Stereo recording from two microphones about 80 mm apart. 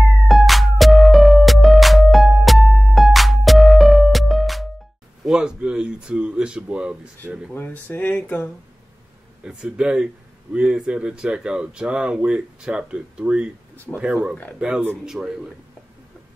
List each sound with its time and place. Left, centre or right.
0.3 s music: centre
5.2 s speech: centre
7.5 s speech: left
9.4 s speech: centre